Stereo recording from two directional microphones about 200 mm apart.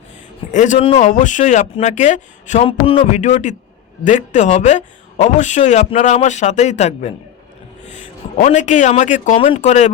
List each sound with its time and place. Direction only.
0.5 s speech: 35° left (ahead or behind)
8.4 s speech: 35° left (ahead or behind)